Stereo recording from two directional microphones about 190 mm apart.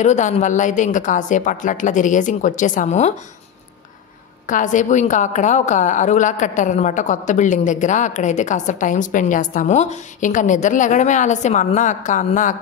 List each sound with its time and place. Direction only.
0.0 s a woman's voice: 35° left (ahead or behind)
4.5 s a woman's voice: 40° left (ahead or behind)